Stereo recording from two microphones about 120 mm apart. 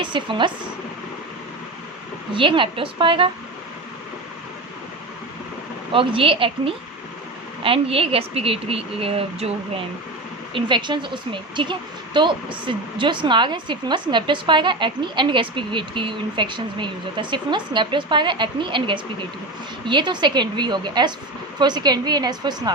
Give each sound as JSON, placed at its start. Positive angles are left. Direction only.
{"t": 0.0, "sound": "a woman's voice", "side_deg": -45}
{"t": 2.3, "sound": "a woman's voice", "side_deg": -45}
{"t": 5.9, "sound": "a woman's voice", "side_deg": -45}
{"t": 10.5, "sound": "a woman's voice", "side_deg": -40}